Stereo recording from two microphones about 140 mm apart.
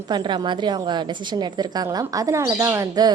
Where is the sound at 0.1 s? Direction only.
35° right (ahead or behind).